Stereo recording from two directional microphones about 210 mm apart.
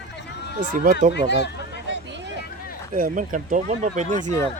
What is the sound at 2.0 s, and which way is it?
Hubbub, 60° right (ahead or behind).